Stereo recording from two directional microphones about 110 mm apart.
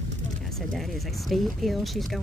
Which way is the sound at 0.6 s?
Centre (ahead or behind).